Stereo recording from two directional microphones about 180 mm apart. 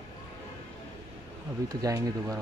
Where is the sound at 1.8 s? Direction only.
20° right (ahead or behind).